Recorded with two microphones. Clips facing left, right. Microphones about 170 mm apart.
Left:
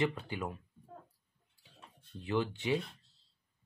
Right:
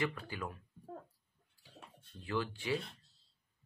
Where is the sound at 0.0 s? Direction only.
20° left (ahead or behind).